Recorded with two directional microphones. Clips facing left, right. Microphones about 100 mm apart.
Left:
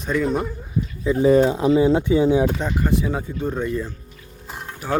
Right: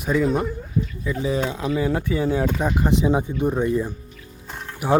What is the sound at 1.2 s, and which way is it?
Speech, 45° left (ahead or behind).